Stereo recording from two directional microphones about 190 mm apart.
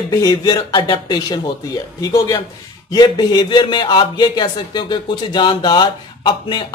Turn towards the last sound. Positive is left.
turn(degrees=25)  # may be behind; listen again after turning